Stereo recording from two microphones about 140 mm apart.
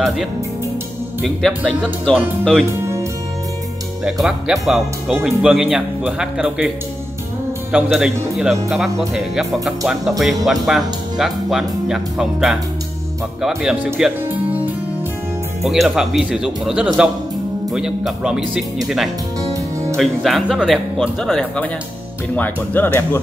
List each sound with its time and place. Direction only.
2.1 s music: 5° left (ahead or behind)
4.0 s music: 5° right (ahead or behind)
7.7 s music: 5° right (ahead or behind)
15.6 s music: centre (ahead or behind)
19.5 s music: 20° right (ahead or behind)
20.0 s music: centre (ahead or behind)
22.3 s speech: 10° left (ahead or behind)